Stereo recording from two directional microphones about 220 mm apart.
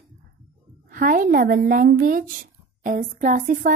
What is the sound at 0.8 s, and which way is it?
Speech, 40° right (ahead or behind).